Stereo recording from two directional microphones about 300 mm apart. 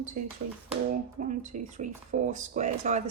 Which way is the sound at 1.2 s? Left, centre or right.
Right.